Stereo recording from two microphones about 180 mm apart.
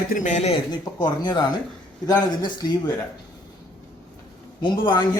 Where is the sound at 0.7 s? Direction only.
25° left (ahead or behind).